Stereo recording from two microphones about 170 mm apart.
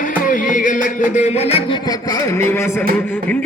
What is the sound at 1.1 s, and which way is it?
Music, 40° left (ahead or behind).